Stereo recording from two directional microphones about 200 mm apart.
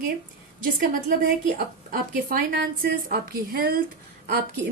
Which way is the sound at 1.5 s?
45° right (ahead or behind).